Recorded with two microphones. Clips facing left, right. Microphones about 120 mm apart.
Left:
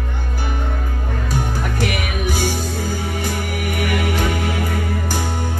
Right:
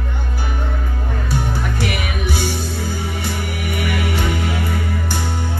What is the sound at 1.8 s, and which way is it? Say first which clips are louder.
Music: left 1 dB; 45° left (ahead or behind).